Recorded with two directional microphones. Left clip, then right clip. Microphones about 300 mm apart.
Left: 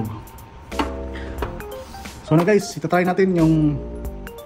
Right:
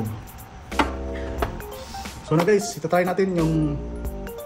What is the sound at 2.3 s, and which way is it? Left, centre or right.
Speech, left.